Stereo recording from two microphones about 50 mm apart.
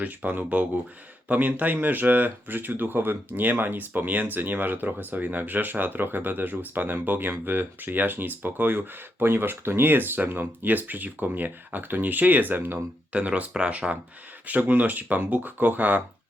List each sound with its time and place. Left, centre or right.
0.0 s speech: right
13.1 s speech: right